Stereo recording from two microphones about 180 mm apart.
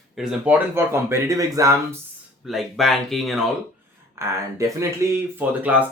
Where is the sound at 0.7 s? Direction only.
15° right (ahead or behind).